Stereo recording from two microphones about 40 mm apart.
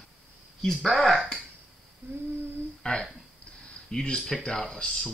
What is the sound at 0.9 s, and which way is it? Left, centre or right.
Speech, centre.